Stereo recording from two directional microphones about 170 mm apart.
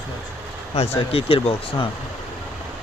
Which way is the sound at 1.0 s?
35° left (ahead or behind).